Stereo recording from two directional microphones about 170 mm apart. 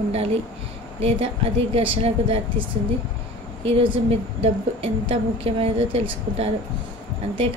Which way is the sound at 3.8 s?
35° right (ahead or behind).